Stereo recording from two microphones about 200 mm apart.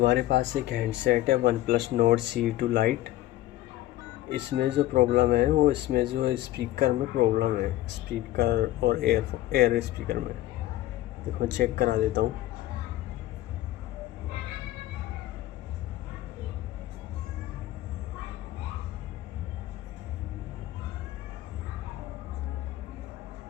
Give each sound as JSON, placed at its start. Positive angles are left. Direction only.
{"t": 0.0, "sound": "speech", "side_deg": -60}
{"t": 4.3, "sound": "speech", "side_deg": -55}
{"t": 11.3, "sound": "speech", "side_deg": -50}